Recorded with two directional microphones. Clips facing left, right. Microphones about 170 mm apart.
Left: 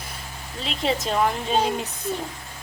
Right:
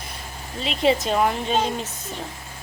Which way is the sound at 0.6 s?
5° right (ahead or behind).